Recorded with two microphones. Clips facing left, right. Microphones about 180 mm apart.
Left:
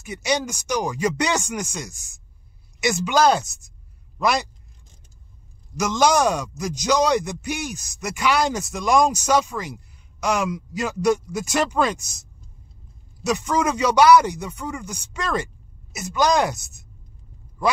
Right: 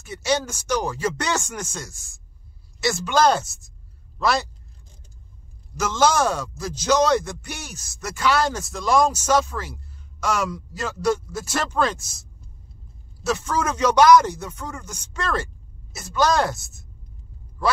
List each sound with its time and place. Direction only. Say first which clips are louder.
0.0 s speech: even; 15° left (ahead or behind)
5.8 s speech: left 1 dB; 15° left (ahead or behind)